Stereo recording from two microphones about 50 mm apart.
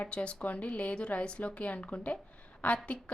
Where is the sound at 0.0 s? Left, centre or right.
Left.